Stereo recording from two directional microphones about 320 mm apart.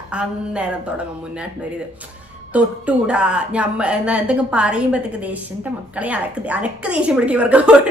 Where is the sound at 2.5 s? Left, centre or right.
Centre.